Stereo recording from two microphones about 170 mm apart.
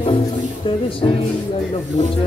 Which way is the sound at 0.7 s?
30° left (ahead or behind).